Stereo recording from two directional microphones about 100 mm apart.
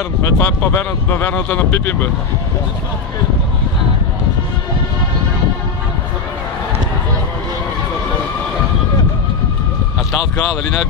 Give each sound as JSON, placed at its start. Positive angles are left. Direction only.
{"t": 0.2, "sound": "speech", "side_deg": 25}